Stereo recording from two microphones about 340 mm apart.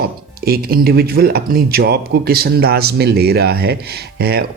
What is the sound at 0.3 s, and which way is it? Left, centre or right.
Speech, right.